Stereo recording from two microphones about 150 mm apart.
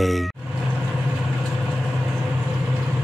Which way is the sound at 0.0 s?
Centre (ahead or behind).